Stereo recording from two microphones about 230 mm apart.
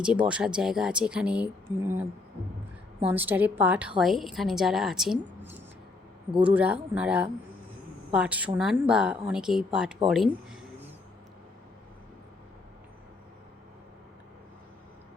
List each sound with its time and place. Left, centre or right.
0.0 s speech: centre
3.1 s speech: centre
6.4 s speech: centre